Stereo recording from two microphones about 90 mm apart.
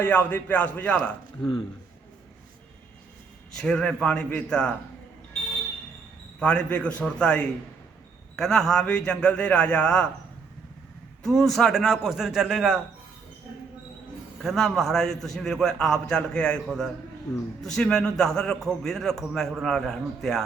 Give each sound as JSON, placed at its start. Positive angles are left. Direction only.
{"t": 0.0, "sound": "a man's voice", "side_deg": 20}
{"t": 1.4, "sound": "speech", "side_deg": 80}
{"t": 3.6, "sound": "a man's voice", "side_deg": 10}
{"t": 6.4, "sound": "a man's voice", "side_deg": 10}
{"t": 11.2, "sound": "a man's voice", "side_deg": 5}
{"t": 14.4, "sound": "a man's voice", "side_deg": 0}